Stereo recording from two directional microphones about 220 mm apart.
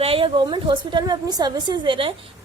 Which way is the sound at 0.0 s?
25° right (ahead or behind).